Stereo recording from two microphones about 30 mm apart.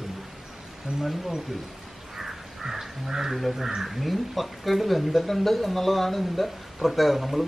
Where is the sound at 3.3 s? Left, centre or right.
Centre.